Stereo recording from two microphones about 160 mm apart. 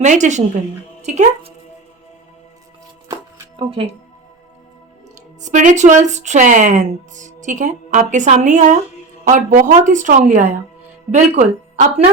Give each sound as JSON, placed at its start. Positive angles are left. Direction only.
{"t": 0.0, "sound": "speech", "side_deg": -50}
{"t": 3.1, "sound": "music", "side_deg": -25}
{"t": 5.4, "sound": "speech", "side_deg": -50}